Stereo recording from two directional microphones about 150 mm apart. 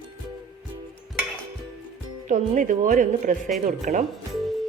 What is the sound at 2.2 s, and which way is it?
Speech, 55° right (ahead or behind).